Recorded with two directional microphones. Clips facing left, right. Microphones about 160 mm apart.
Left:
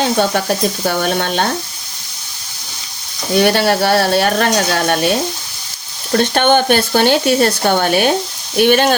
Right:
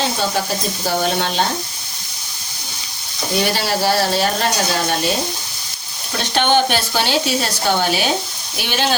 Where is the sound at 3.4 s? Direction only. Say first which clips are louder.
Left 7 dB; 60° left (ahead or behind).